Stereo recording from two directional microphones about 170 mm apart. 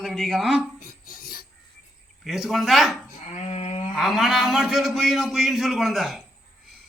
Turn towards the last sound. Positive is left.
turn(degrees=0)  # may be behind; listen again after turning